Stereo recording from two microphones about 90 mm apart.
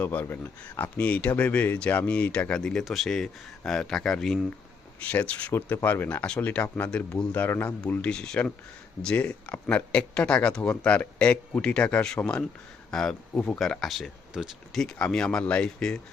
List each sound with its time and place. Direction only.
0.0 s speech: 15° left (ahead or behind)
5.0 s speech: 15° left (ahead or behind)
7.4 s speech: 20° left (ahead or behind)